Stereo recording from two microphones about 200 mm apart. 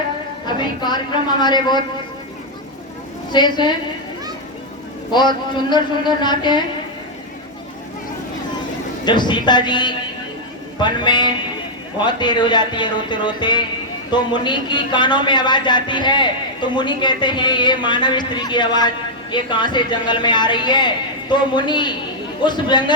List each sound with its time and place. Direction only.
0.4 s speech: 20° left (ahead or behind)
3.3 s speech: 20° left (ahead or behind)
5.1 s speech: 20° left (ahead or behind)
9.0 s speech: 20° left (ahead or behind)